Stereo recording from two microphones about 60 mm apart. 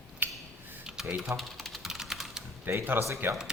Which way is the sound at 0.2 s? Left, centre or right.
Right.